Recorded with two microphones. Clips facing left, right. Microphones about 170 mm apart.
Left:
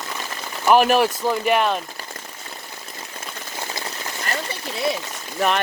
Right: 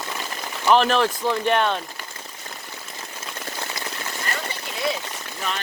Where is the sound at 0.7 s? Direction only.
10° left (ahead or behind).